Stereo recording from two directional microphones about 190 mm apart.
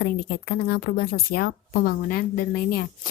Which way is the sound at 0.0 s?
50° left (ahead or behind).